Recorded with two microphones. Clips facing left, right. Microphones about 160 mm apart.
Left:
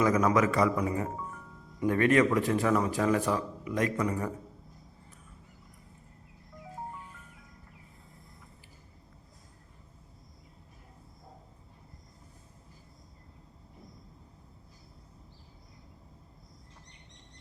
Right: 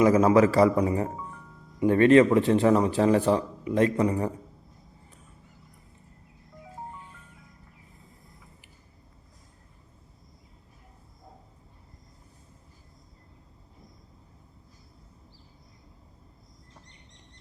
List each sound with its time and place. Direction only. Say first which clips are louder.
0.0 s speech: right 6 dB; 30° right (ahead or behind)